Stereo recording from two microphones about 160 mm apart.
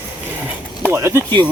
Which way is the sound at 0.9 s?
20° right (ahead or behind).